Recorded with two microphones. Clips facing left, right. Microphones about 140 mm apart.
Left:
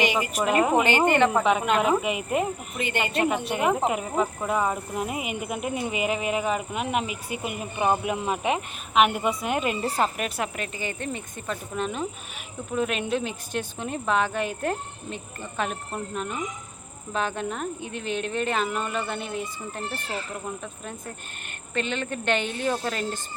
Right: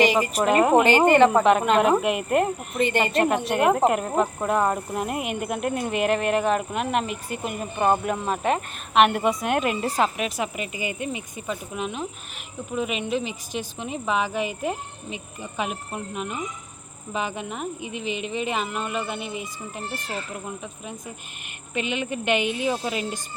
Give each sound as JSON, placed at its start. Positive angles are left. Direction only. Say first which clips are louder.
{"t": 0.0, "sound": "speech", "louder": "right 5 dB", "side_deg": -40}
{"t": 0.3, "sound": "speech", "louder": "right 3 dB", "side_deg": 0}
{"t": 0.9, "sound": "speech", "louder": "right 4 dB", "side_deg": -35}
{"t": 1.1, "sound": "speech", "louder": "right 5 dB", "side_deg": 0}
{"t": 2.8, "sound": "speech", "louder": "right 6 dB", "side_deg": -35}
{"t": 3.1, "sound": "speech", "louder": "right 3 dB", "side_deg": 0}
{"t": 21.4, "sound": "speech", "louder": "even", "side_deg": -5}